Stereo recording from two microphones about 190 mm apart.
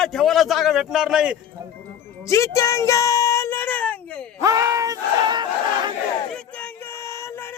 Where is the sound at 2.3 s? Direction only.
15° left (ahead or behind).